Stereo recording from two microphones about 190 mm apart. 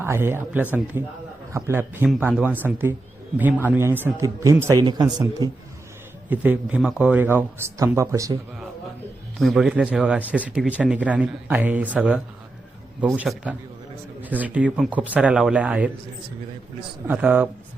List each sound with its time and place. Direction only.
0.0 s speech: 10° right (ahead or behind)
6.2 s speech: 10° right (ahead or behind)
9.4 s speech: centre (ahead or behind)
17.1 s speech: 10° right (ahead or behind)